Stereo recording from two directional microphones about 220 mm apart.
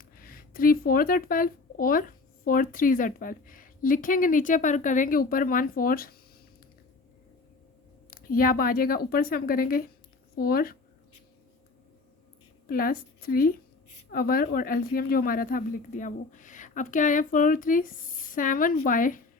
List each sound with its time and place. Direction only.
0.0 s speech: 40° left (ahead or behind)
8.1 s a woman's voice: 40° left (ahead or behind)
12.6 s a woman's voice: 40° left (ahead or behind)